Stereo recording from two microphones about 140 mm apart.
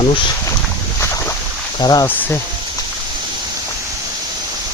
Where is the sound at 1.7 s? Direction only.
30° left (ahead or behind).